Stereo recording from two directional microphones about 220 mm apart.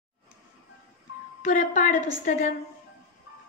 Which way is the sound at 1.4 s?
35° left (ahead or behind).